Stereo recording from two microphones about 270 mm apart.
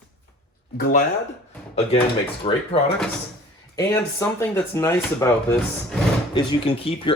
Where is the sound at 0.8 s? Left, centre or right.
Left.